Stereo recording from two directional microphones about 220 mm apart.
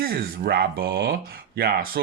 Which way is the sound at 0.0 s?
45° right (ahead or behind).